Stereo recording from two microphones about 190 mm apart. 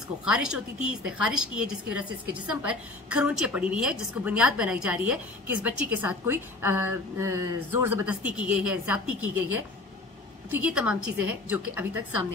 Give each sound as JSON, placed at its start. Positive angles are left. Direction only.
{"t": 0.2, "sound": "a woman's voice", "side_deg": -5}
{"t": 10.5, "sound": "a woman's voice", "side_deg": -5}